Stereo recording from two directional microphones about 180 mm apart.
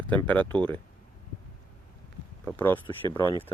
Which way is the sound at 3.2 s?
25° left (ahead or behind).